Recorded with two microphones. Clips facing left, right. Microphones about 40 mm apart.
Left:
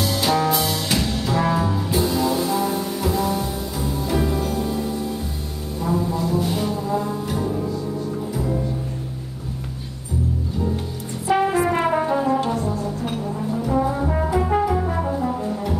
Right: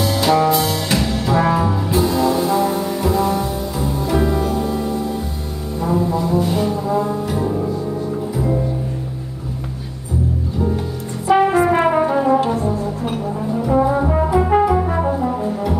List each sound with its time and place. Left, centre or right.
0.0 s music: centre
5.9 s music: centre
6.4 s brass instrument: centre
11.2 s brass instrument: centre
13.0 s brass instrument: centre